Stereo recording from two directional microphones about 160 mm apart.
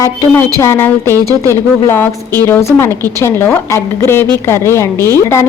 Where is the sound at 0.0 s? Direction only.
15° left (ahead or behind).